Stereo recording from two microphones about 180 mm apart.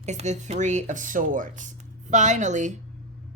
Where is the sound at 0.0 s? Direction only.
40° right (ahead or behind).